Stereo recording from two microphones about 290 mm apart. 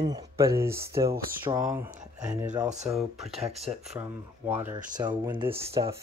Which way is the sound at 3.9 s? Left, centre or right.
Centre.